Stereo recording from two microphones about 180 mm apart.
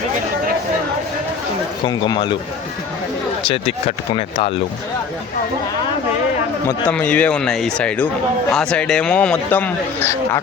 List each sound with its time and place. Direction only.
1.8 s speech: 25° left (ahead or behind)
3.4 s speech: 35° left (ahead or behind)
6.7 s speech: 10° left (ahead or behind)